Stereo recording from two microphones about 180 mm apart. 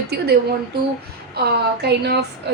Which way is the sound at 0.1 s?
65° right (ahead or behind).